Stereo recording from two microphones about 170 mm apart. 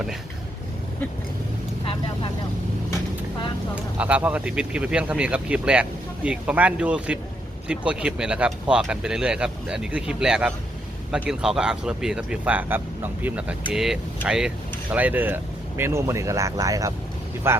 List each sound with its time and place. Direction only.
1.8 s vehicle: 30° left (ahead or behind)
3.9 s speech: 10° right (ahead or behind)